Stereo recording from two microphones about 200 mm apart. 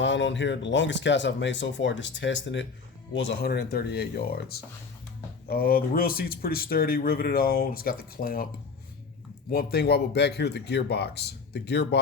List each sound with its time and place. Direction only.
0.0 s speech: 65° left (ahead or behind); by 8.4 s 45° left (ahead or behind)
9.5 s speech: 50° left (ahead or behind)